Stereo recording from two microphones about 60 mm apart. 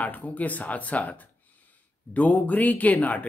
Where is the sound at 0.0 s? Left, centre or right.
Left.